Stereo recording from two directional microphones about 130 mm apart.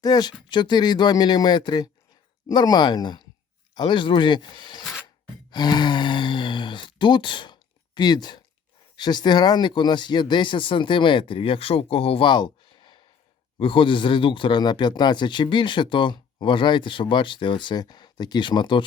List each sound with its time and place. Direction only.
0.0 s speech: 30° left (ahead or behind)